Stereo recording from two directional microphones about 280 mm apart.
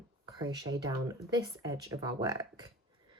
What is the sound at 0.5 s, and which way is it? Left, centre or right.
Speech, centre.